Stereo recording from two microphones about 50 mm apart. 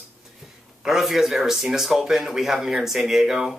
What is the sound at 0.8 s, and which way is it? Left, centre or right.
Speech, centre.